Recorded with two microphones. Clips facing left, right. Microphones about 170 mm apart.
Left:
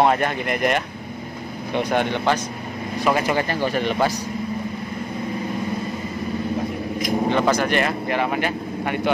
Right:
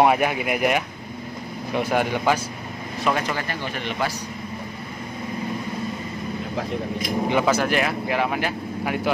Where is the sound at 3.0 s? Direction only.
5° left (ahead or behind).